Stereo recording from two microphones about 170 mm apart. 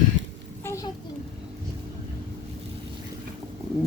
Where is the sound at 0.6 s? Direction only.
15° left (ahead or behind).